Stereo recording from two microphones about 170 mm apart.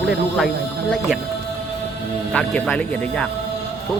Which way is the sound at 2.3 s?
5° left (ahead or behind).